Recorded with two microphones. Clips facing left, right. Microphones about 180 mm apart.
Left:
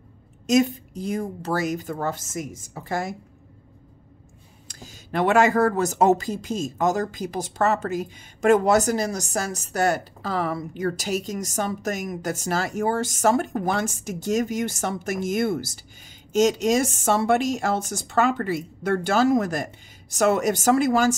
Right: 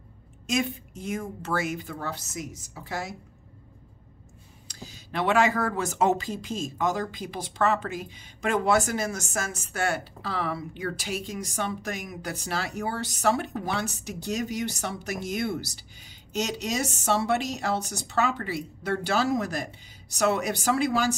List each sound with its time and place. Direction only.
0.5 s speech: 40° left (ahead or behind)
4.6 s speech: 50° left (ahead or behind)